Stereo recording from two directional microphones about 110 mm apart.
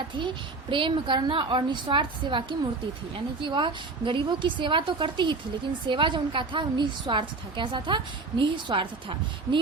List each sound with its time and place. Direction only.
0.2 s a woman's voice: 50° right (ahead or behind)